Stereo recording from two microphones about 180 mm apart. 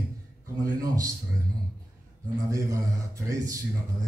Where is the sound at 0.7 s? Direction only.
20° right (ahead or behind).